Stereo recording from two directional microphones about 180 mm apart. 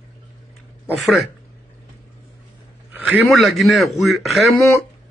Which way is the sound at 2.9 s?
10° right (ahead or behind).